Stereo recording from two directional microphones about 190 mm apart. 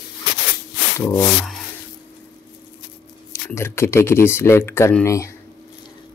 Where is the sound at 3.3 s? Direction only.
15° left (ahead or behind).